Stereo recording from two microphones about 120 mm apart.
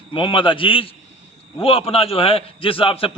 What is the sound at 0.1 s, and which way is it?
A man's voice, 45° left (ahead or behind).